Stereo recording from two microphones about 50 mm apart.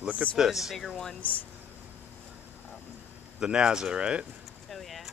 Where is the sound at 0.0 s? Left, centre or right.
Right.